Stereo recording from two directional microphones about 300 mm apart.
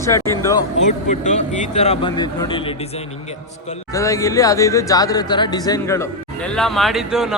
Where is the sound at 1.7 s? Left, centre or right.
Centre.